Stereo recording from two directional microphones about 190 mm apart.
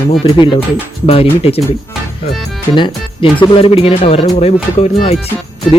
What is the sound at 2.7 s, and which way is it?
Speech, 25° left (ahead or behind).